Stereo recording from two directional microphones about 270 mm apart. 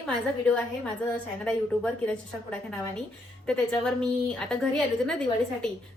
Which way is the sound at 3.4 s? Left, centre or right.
Centre.